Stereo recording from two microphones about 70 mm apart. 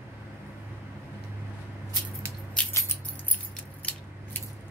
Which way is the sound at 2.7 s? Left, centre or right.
Left.